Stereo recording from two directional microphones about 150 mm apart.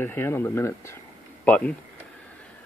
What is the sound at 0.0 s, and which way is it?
Speech, 15° left (ahead or behind).